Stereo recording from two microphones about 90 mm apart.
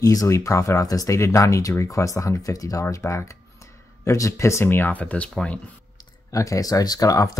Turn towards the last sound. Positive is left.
turn(degrees=40)  # may be behind; listen again after turning